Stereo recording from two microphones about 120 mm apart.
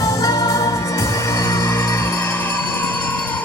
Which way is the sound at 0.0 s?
30° left (ahead or behind).